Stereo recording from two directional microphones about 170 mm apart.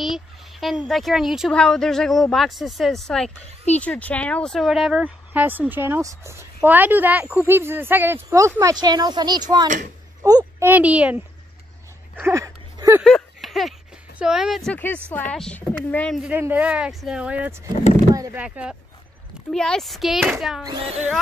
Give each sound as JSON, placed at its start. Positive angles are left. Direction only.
{"t": 0.0, "sound": "a sound", "side_deg": 0}
{"t": 0.8, "sound": "speech", "side_deg": 0}
{"t": 10.7, "sound": "speech", "side_deg": -10}
{"t": 12.2, "sound": "a sound", "side_deg": -15}
{"t": 13.0, "sound": "a sound", "side_deg": 0}
{"t": 15.0, "sound": "a woman's voice", "side_deg": 10}
{"t": 16.2, "sound": "speech", "side_deg": -10}
{"t": 18.1, "sound": "speech", "side_deg": -20}
{"t": 18.4, "sound": "speech", "side_deg": -5}
{"t": 20.6, "sound": "speech", "side_deg": -25}